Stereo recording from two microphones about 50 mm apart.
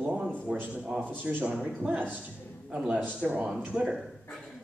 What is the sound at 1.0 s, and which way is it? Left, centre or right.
Speech, right.